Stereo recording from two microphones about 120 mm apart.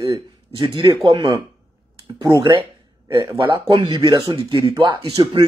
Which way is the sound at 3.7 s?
40° right (ahead or behind).